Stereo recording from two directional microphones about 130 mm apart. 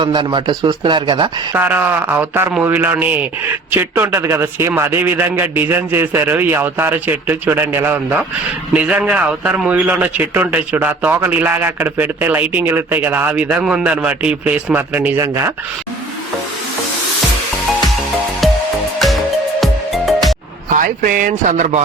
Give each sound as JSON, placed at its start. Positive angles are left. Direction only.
{"t": 0.0, "sound": "a man's voice", "side_deg": -35}
{"t": 1.5, "sound": "a man's voice", "side_deg": -15}
{"t": 19.5, "sound": "music", "side_deg": 0}
{"t": 20.7, "sound": "a man's voice", "side_deg": -90}